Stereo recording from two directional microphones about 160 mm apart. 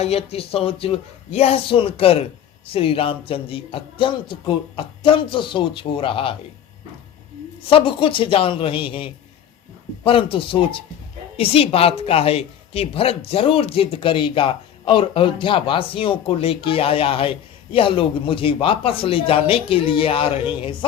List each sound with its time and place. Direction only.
0.0 s speech: 40° left (ahead or behind)
7.7 s speech: 35° left (ahead or behind)